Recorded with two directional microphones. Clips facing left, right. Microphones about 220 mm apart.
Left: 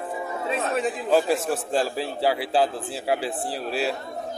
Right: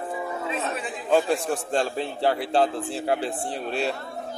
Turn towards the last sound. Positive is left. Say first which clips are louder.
# left 1 dB
turn(degrees=5)  # may be behind; listen again after turning